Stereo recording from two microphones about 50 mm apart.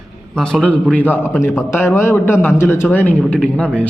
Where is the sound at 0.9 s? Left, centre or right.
Left.